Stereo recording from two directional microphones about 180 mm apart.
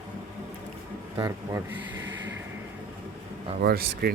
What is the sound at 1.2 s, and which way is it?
Speech, 15° right (ahead or behind).